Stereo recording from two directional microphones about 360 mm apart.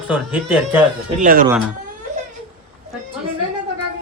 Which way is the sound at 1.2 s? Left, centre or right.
Right.